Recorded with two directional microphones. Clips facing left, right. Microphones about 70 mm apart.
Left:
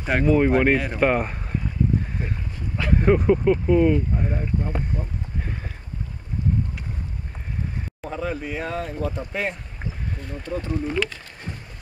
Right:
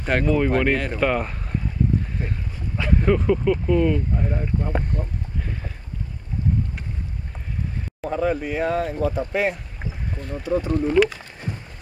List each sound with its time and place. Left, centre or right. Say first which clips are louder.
0.0 s speech: left 1 dB; centre
2.8 s speech: left 1 dB; centre
8.0 s speech: right 6 dB; centre